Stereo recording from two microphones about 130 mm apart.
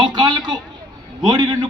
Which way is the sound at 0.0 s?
35° right (ahead or behind).